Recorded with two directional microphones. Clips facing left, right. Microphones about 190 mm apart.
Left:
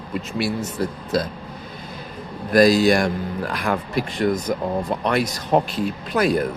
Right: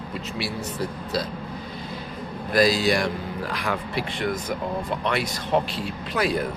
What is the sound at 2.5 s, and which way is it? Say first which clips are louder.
Speech: left 6 dB; 50° left (ahead or behind).